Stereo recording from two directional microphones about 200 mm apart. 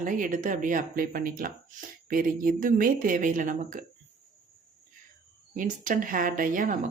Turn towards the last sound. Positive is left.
turn(degrees=-40)  # may be behind; listen again after turning